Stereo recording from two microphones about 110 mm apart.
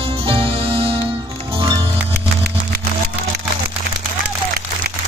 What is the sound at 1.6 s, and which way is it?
Music, 40° right (ahead or behind).